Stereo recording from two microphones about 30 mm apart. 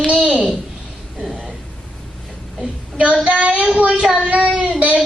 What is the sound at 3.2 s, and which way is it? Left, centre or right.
Child singing, right.